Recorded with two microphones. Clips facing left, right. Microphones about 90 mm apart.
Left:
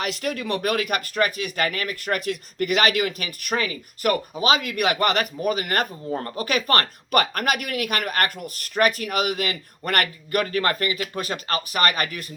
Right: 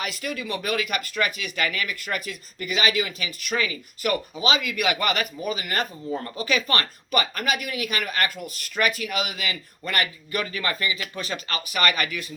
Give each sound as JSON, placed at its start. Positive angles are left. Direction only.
{"t": 0.0, "sound": "speech", "side_deg": 60}